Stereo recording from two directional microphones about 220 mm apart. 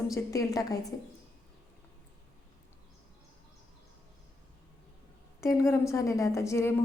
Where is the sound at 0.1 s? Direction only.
15° left (ahead or behind).